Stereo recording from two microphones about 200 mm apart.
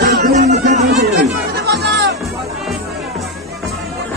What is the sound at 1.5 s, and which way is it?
Music, 55° right (ahead or behind).